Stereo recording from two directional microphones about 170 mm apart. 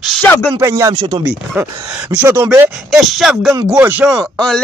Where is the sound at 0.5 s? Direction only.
15° right (ahead or behind).